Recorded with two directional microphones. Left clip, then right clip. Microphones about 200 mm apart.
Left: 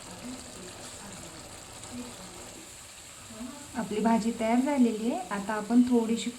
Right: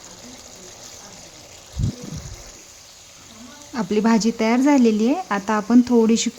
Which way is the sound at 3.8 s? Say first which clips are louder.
Right 8 dB; 55° right (ahead or behind).